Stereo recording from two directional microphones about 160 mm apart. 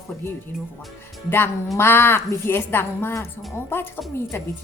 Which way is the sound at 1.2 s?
15° left (ahead or behind).